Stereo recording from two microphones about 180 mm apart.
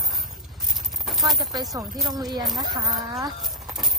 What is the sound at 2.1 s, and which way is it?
Speech, 25° right (ahead or behind).